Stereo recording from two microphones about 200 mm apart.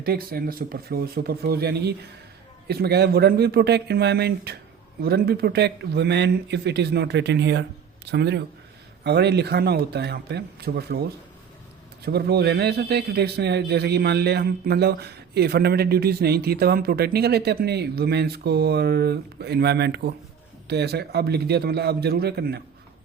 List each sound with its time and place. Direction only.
0.0 s a man's voice: 50° right (ahead or behind)
12.0 s a man's voice: 55° right (ahead or behind)